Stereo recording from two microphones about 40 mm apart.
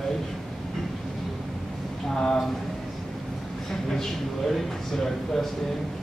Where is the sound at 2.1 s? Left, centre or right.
Centre.